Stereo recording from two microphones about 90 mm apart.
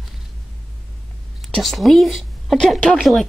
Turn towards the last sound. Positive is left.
turn(degrees=10)  # may be behind; listen again after turning